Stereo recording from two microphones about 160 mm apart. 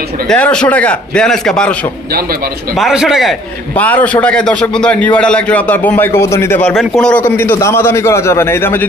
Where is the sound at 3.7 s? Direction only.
10° left (ahead or behind).